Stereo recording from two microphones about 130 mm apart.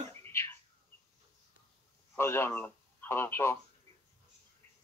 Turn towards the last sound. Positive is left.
turn(degrees=20)  # may be behind; listen again after turning